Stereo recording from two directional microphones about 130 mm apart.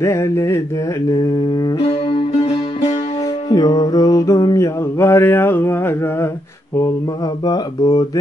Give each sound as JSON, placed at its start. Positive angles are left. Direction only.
{"t": 0.0, "sound": "mantra", "side_deg": 20}
{"t": 1.8, "sound": "music", "side_deg": 45}
{"t": 3.4, "sound": "mantra", "side_deg": 30}
{"t": 7.4, "sound": "mantra", "side_deg": 30}